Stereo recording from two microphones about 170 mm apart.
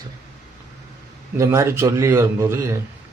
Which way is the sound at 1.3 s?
15° right (ahead or behind).